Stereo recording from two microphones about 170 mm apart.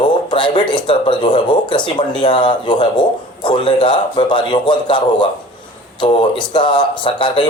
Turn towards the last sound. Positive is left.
turn(degrees=30)  # may be behind; listen again after turning